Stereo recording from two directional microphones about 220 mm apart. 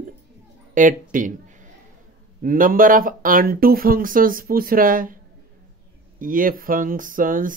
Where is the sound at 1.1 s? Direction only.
35° right (ahead or behind).